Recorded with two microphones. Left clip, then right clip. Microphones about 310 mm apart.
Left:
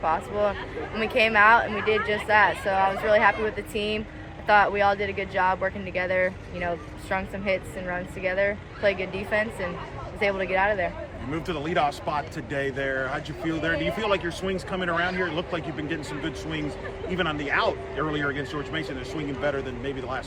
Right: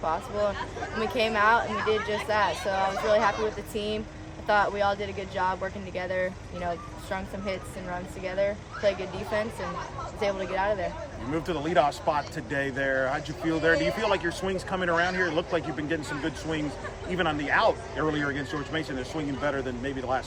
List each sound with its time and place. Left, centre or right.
0.0 s speech: centre
11.3 s speech: right